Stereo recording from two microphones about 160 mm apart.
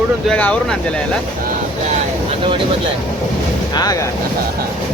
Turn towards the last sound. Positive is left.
turn(degrees=25)  # may be behind; listen again after turning